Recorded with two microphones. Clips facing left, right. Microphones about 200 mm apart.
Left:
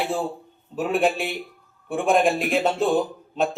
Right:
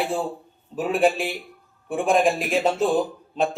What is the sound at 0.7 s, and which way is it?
A man's voice, centre (ahead or behind).